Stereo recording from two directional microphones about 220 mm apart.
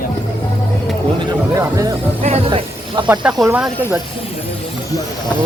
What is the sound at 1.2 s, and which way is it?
Speech, 15° right (ahead or behind).